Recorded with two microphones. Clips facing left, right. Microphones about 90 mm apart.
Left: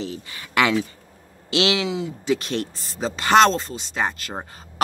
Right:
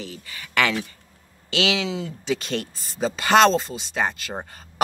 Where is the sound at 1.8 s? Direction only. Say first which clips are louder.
Left 2 dB; centre (ahead or behind).